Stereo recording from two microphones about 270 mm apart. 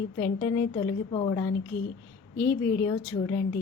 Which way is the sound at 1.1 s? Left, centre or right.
Centre.